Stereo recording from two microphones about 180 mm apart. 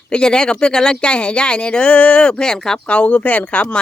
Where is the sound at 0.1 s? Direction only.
5° left (ahead or behind).